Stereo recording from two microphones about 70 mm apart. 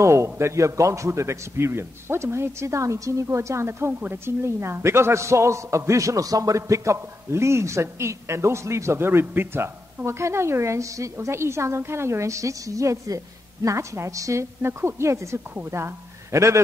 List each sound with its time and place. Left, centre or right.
0.0 s a man's voice: right
14.6 s speech: right